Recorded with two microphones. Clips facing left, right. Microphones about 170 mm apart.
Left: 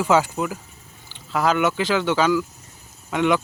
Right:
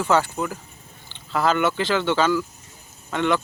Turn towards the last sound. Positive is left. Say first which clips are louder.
# left 2 dB
turn(degrees=10)  # may be behind; listen again after turning